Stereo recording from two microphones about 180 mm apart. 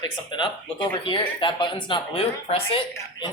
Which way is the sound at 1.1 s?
25° left (ahead or behind).